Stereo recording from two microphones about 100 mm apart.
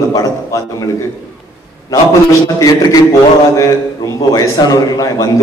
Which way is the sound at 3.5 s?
35° left (ahead or behind).